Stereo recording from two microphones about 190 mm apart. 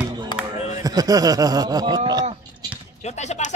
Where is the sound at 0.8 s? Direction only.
20° right (ahead or behind).